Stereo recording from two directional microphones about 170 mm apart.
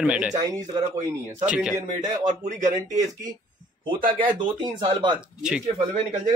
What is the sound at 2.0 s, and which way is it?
Speech, 25° right (ahead or behind).